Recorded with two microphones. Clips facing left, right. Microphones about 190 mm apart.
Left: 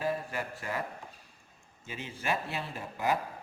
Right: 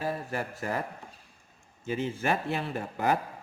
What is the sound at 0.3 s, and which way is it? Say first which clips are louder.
Speech: right 4 dB; 45° right (ahead or behind).